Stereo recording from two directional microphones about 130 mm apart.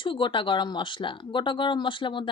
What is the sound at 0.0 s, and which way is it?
Speech, 40° left (ahead or behind).